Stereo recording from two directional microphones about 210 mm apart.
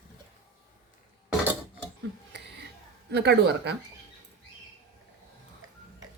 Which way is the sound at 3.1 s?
55° right (ahead or behind).